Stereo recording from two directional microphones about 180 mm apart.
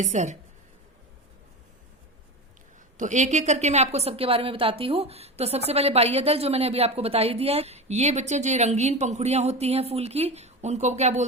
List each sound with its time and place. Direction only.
0.0 s a woman's voice: 40° right (ahead or behind)
3.0 s a woman's voice: 40° right (ahead or behind)